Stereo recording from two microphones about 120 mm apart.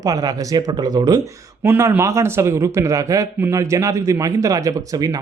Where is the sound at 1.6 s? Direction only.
20° right (ahead or behind).